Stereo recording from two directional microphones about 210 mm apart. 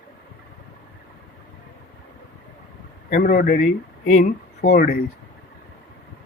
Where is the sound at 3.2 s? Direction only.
40° left (ahead or behind).